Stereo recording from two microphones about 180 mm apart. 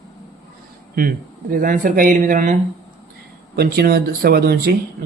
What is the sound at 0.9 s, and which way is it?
Speech, 50° right (ahead or behind).